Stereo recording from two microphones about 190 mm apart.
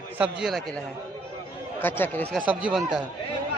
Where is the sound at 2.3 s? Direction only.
5° right (ahead or behind).